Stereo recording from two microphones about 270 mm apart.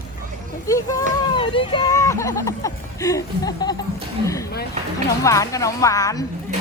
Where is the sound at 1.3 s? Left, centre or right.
Centre.